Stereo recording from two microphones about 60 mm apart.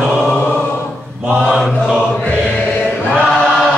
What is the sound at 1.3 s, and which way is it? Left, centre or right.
Chant, centre.